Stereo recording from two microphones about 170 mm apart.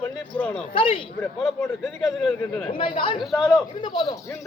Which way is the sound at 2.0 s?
Centre (ahead or behind).